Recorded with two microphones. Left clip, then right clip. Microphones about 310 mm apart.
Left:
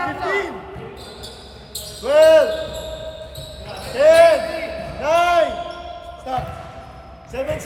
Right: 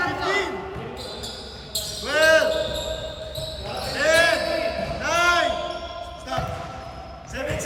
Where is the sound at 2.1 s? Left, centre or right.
Centre.